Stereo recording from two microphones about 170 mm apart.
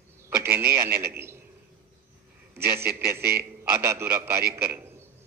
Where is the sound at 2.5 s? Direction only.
15° right (ahead or behind).